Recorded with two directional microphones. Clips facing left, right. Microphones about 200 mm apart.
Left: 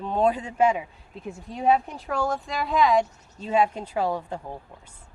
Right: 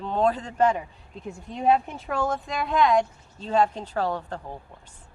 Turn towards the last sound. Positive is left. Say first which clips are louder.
# left 1 dB
turn(degrees=10)  # may be behind; listen again after turning